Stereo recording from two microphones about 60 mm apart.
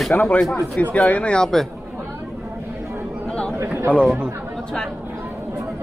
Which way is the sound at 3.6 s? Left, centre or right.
Right.